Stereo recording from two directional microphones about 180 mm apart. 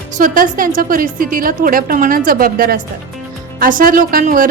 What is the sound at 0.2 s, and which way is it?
A woman's voice, 50° right (ahead or behind).